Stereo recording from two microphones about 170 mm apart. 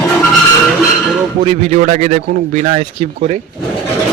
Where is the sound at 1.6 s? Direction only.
45° right (ahead or behind).